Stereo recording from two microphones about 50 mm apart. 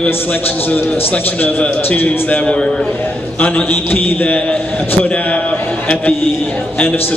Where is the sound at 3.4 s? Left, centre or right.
Left.